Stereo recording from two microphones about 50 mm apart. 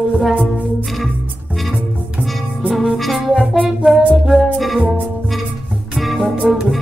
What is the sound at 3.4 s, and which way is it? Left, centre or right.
Music, right.